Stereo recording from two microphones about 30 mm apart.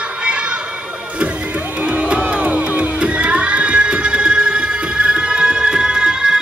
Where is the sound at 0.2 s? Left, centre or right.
Right.